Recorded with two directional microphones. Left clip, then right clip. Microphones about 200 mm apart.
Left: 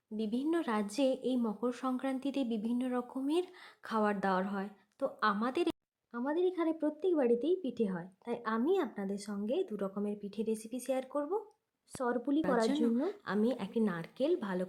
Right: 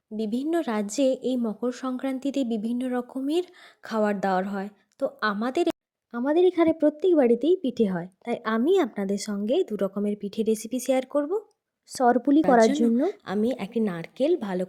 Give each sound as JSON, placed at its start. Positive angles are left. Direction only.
{"t": 0.2, "sound": "a woman's voice", "side_deg": -25}